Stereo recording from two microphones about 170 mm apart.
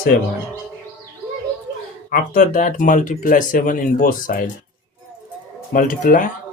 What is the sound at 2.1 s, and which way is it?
Speech, 50° left (ahead or behind).